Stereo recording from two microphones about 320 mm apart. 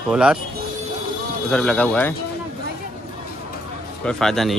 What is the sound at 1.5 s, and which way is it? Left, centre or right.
Speech, centre.